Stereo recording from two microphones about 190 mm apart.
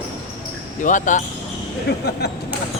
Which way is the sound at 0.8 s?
40° left (ahead or behind).